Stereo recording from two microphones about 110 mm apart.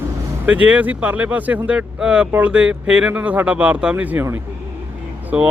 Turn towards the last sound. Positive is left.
turn(degrees=-10)  # may be behind; listen again after turning